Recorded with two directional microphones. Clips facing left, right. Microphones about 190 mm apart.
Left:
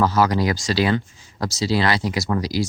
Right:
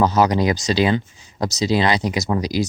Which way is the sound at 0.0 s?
20° right (ahead or behind).